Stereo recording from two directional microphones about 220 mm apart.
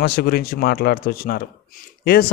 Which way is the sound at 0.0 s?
45° left (ahead or behind).